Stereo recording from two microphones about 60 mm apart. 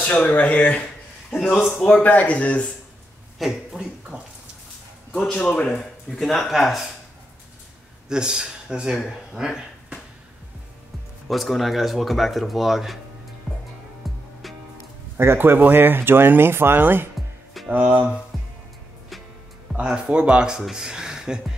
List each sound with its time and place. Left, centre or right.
0.0 s a man's voice: left
2.0 s speech: left
3.3 s speech: centre
5.1 s a man's voice: centre
8.1 s speech: centre
11.2 s speech: centre
14.0 s music: centre
15.1 s speech: right
18.3 s music: centre
19.7 s speech: centre